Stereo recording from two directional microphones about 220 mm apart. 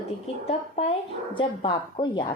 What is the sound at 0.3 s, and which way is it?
A woman's voice, 25° left (ahead or behind).